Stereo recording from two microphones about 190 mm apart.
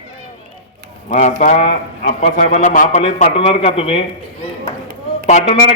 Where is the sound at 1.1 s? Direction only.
40° left (ahead or behind).